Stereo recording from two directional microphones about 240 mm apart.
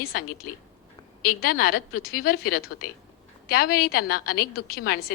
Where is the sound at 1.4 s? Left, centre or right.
Left.